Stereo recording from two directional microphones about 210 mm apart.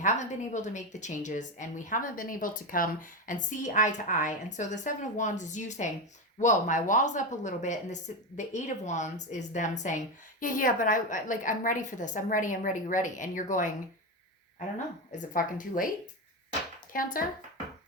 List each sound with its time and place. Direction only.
0.0 s a woman's voice: 35° left (ahead or behind)
15.1 s a woman's voice: 35° left (ahead or behind)
16.9 s a woman's voice: 40° left (ahead or behind)